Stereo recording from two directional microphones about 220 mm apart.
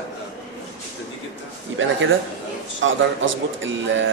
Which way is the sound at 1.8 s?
60° right (ahead or behind).